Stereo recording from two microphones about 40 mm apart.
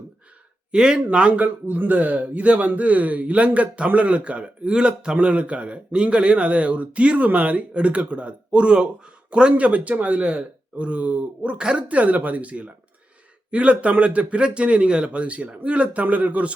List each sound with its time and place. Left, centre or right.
0.7 s speech: centre
1.4 s speech: right
11.9 s speech: right